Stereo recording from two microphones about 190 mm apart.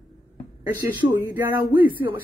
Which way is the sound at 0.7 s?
20° right (ahead or behind).